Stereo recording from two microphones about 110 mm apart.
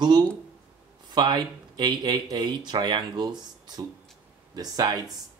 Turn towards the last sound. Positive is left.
turn(degrees=-35)  # may be behind; listen again after turning